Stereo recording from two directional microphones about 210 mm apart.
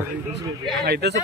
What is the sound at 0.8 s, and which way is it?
Speech, 50° right (ahead or behind).